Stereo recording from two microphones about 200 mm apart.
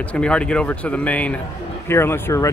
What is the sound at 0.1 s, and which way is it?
Speech, 5° left (ahead or behind).